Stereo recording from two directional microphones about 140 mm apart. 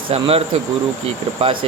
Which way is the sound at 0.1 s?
45° right (ahead or behind).